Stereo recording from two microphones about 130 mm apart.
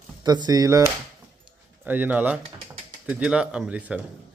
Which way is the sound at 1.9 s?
15° right (ahead or behind).